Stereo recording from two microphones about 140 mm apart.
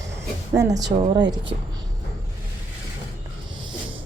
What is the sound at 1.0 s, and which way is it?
Speech, 30° right (ahead or behind).